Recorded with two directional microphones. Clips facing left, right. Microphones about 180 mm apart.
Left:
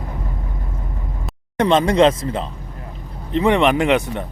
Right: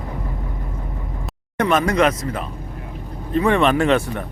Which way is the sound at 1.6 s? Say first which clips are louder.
Left 3 dB; 25° left (ahead or behind).